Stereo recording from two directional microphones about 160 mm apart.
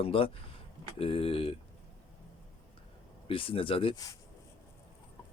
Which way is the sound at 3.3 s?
35° left (ahead or behind).